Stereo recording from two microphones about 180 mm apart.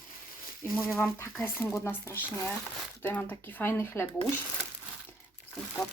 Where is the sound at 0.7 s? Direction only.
10° left (ahead or behind).